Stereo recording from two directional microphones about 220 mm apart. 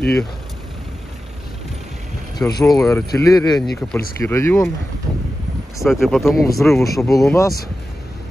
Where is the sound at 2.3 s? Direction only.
15° left (ahead or behind).